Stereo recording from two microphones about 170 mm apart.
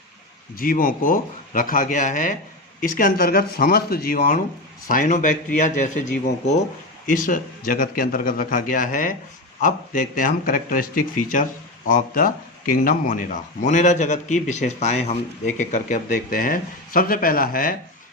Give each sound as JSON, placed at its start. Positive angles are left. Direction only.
{"t": 0.5, "sound": "speech", "side_deg": 60}
{"t": 4.9, "sound": "speech", "side_deg": 50}